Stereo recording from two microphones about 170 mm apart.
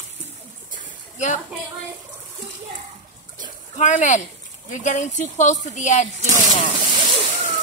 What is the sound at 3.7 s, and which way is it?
A woman's voice, 45° left (ahead or behind).